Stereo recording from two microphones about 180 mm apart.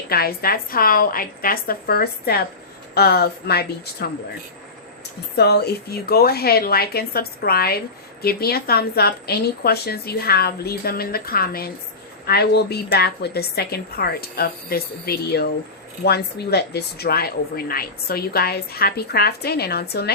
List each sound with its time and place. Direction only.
0.1 s a woman's voice: 60° left (ahead or behind)
5.4 s a woman's voice: 65° left (ahead or behind)